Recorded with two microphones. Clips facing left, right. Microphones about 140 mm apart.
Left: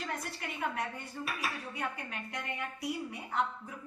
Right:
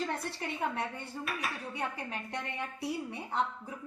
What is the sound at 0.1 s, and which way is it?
A woman's voice, 30° right (ahead or behind).